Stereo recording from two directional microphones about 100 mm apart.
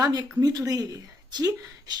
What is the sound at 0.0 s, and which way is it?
Speech, 45° right (ahead or behind).